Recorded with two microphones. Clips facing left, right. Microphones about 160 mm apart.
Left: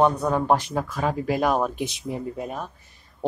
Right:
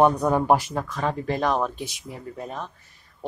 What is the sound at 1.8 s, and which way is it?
Speech, 20° left (ahead or behind).